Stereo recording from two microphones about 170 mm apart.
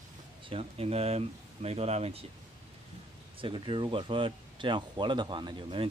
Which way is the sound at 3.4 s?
30° right (ahead or behind).